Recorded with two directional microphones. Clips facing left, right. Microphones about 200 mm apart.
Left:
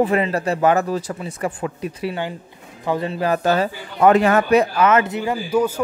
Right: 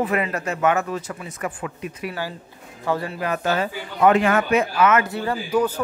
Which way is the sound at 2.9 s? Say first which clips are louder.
Left 4 dB; 20° left (ahead or behind).